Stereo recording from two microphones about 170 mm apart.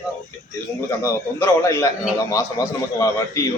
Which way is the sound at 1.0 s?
15° left (ahead or behind).